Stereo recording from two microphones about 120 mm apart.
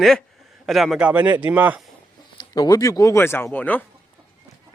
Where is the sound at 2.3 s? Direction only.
35° left (ahead or behind); by 3.8 s 15° left (ahead or behind).